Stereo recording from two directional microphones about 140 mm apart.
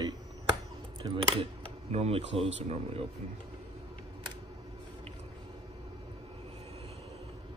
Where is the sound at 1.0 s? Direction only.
35° right (ahead or behind).